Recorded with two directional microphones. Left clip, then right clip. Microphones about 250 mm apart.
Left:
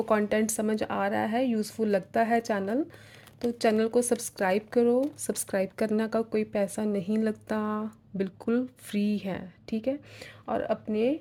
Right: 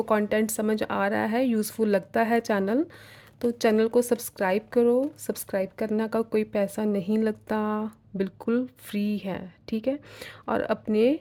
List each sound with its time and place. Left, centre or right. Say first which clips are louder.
0.0 s speech: right 2 dB; centre